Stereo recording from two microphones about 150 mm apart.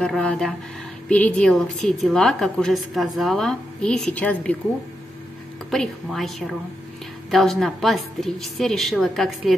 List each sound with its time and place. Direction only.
0.0 s a woman's voice: 5° left (ahead or behind)
5.7 s a woman's voice: centre (ahead or behind)